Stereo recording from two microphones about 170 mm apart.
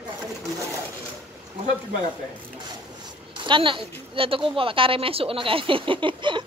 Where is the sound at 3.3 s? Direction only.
30° right (ahead or behind).